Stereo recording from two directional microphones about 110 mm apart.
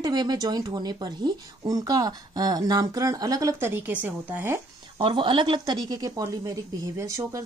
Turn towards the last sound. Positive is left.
turn(degrees=-30)  # may be behind; listen again after turning